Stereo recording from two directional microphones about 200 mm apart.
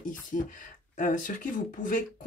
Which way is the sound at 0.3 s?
40° left (ahead or behind).